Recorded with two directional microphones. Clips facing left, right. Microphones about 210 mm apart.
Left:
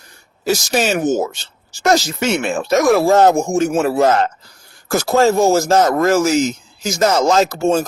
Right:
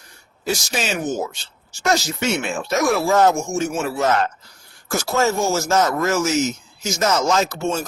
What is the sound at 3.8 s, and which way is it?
Speech, 35° left (ahead or behind).